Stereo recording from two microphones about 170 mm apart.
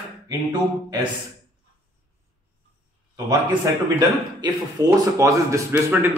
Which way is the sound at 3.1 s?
20° right (ahead or behind).